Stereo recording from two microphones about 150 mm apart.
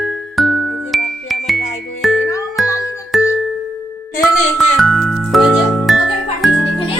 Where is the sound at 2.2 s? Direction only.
20° left (ahead or behind).